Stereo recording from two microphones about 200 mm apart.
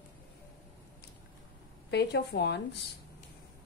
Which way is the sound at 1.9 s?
55° left (ahead or behind).